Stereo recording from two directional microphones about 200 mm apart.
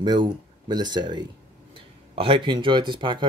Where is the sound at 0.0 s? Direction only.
20° right (ahead or behind).